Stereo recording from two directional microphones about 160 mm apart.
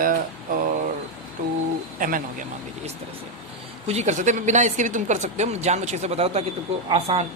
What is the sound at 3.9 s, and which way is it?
A woman's voice, 45° right (ahead or behind).